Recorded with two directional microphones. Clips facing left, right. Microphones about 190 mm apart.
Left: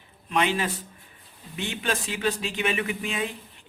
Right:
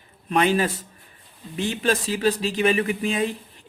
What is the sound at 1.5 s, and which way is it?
Speech, 35° right (ahead or behind).